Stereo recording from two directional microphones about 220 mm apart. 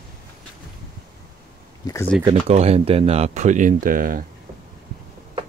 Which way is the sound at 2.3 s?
30° right (ahead or behind).